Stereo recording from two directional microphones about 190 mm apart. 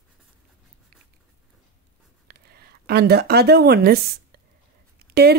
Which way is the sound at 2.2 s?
55° right (ahead or behind).